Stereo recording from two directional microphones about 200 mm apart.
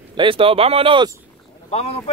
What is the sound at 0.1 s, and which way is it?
Speech, 25° right (ahead or behind).